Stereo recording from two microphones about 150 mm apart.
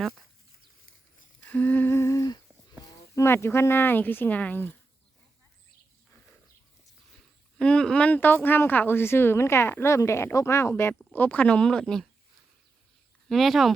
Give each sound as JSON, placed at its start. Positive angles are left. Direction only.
{"t": 1.5, "sound": "humming", "side_deg": 10}
{"t": 3.2, "sound": "speech", "side_deg": 15}
{"t": 7.6, "sound": "speech", "side_deg": 5}
{"t": 13.2, "sound": "speech", "side_deg": 0}